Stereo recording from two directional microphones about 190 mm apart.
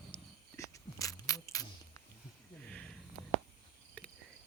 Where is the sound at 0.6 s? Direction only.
15° left (ahead or behind).